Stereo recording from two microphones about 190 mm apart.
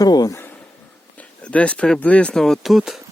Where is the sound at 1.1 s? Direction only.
5° left (ahead or behind).